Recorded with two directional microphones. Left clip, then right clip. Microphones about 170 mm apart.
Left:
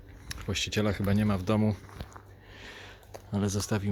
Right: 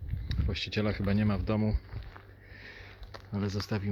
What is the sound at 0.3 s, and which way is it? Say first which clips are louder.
Speech: left 4 dB; 15° left (ahead or behind).